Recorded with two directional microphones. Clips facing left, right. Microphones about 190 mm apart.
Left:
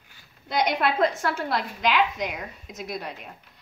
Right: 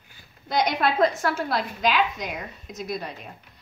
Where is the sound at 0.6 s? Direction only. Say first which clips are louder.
Right 1 dB; 25° left (ahead or behind).